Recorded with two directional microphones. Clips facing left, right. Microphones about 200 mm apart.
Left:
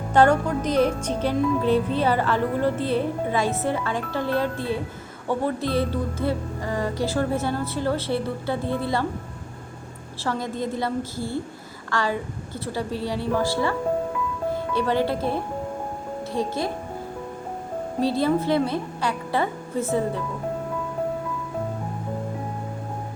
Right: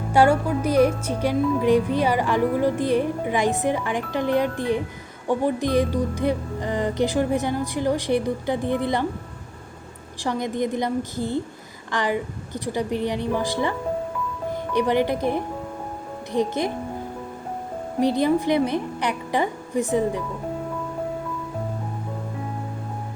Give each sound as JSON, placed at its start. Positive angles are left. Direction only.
{"t": 0.1, "sound": "speech", "side_deg": -10}
{"t": 10.2, "sound": "speech", "side_deg": -20}
{"t": 18.0, "sound": "speech", "side_deg": -15}